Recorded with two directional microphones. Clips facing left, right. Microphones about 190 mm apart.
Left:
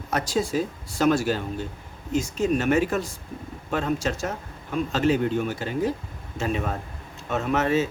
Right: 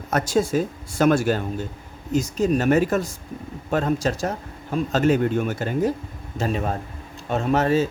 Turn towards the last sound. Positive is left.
turn(degrees=-35)  # may be behind; listen again after turning